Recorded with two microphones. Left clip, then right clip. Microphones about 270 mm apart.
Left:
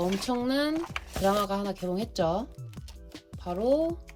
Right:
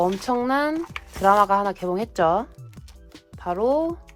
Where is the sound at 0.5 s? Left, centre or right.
Centre.